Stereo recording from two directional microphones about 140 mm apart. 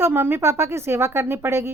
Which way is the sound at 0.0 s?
15° right (ahead or behind).